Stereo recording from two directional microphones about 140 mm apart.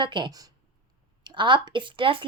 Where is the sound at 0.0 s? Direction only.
35° right (ahead or behind).